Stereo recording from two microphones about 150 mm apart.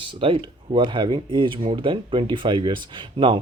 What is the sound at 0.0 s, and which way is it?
Speech, 35° right (ahead or behind).